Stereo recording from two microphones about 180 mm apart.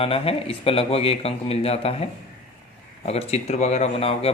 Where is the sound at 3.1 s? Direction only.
35° left (ahead or behind).